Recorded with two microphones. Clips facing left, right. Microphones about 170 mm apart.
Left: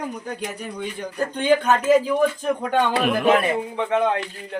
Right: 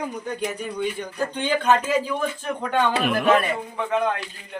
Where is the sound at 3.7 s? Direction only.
30° left (ahead or behind).